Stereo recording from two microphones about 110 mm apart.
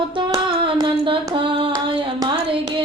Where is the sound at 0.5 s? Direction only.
55° right (ahead or behind).